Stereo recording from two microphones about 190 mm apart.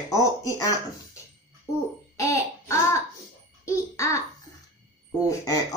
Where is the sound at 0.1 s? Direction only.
15° left (ahead or behind).